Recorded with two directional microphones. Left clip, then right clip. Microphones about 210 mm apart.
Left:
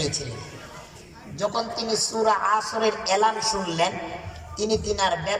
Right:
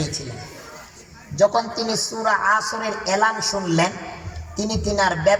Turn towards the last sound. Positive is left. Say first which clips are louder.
# right 6 dB
turn(degrees=-40)  # may be behind; listen again after turning